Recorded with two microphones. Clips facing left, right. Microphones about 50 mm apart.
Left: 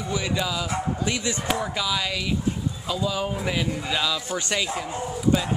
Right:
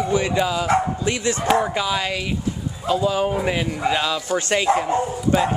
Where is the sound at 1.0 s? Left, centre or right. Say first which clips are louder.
Right 5 dB; right.